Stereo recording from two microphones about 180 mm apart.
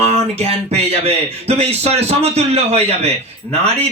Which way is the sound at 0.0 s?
35° right (ahead or behind).